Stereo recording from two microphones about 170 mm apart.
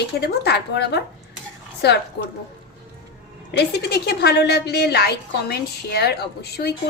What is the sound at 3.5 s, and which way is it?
A woman's voice, 80° left.